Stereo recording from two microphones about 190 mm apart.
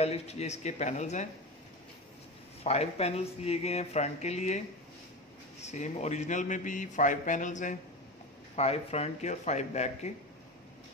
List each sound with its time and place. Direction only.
0.0 s a man's voice: 35° left (ahead or behind)
2.6 s a man's voice: 35° left (ahead or behind)
5.6 s a man's voice: 35° left (ahead or behind)